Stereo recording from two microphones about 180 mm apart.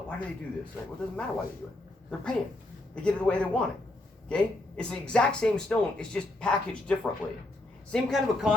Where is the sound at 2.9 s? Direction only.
5° left (ahead or behind).